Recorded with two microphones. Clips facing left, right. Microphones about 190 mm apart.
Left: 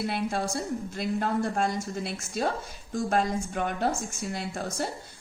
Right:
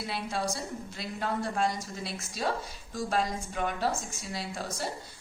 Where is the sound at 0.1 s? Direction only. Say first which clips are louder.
Left 4 dB; 55° left (ahead or behind).